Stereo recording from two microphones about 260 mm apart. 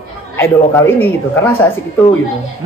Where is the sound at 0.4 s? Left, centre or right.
Centre.